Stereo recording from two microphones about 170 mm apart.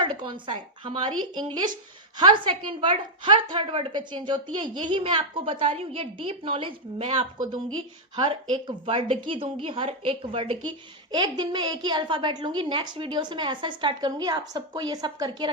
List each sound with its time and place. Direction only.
0.0 s a woman's voice: 30° right (ahead or behind)